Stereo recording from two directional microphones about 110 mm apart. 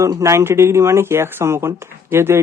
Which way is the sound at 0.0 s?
25° right (ahead or behind).